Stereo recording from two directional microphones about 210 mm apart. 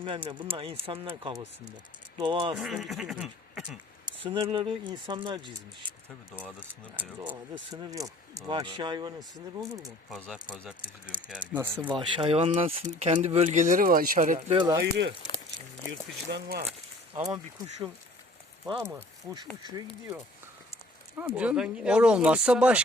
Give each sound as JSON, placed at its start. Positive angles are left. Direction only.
{"t": 0.0, "sound": "speech", "side_deg": -25}
{"t": 2.6, "sound": "speech", "side_deg": 0}
{"t": 4.2, "sound": "speech", "side_deg": -25}
{"t": 6.9, "sound": "speech", "side_deg": -20}
{"t": 10.1, "sound": "speech", "side_deg": 0}
{"t": 11.9, "sound": "speech", "side_deg": -25}
{"t": 14.8, "sound": "speech", "side_deg": -55}
{"t": 18.8, "sound": "speech", "side_deg": -10}
{"t": 21.2, "sound": "speech", "side_deg": -5}